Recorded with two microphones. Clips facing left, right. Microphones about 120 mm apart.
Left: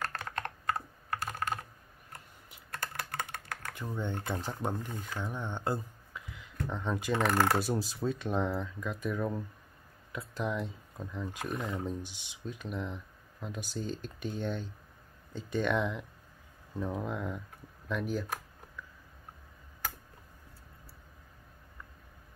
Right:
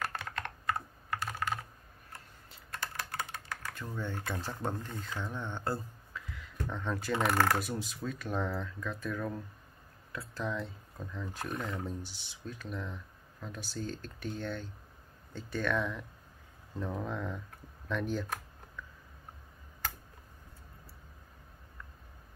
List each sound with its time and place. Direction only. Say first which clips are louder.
0.1 s computer keyboard: even; 10° right (ahead or behind)
2.8 s typing: left 1 dB; 55° left (ahead or behind)
3.7 s speech: left 4 dB; 15° left (ahead or behind)
7.4 s speech: left 2 dB; 30° left (ahead or behind)
8.3 s speech: left 3 dB; 15° left (ahead or behind)